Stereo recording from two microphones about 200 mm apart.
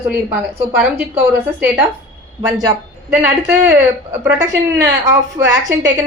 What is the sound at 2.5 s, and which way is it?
Speech, 20° right (ahead or behind).